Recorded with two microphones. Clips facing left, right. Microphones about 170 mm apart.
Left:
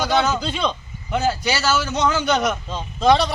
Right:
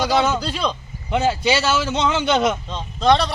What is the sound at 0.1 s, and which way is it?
Speech, 5° right (ahead or behind).